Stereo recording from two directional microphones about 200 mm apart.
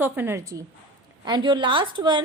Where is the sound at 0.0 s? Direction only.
10° right (ahead or behind).